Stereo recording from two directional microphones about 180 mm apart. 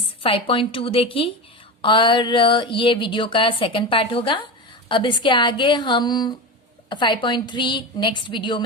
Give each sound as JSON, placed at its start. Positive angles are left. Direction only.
{"t": 0.2, "sound": "a woman's voice", "side_deg": 30}